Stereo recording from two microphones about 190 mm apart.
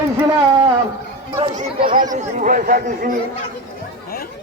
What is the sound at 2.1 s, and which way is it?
Speech, 45° right (ahead or behind).